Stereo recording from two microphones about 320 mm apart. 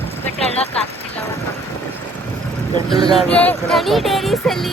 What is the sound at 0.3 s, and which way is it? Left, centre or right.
Speech, centre.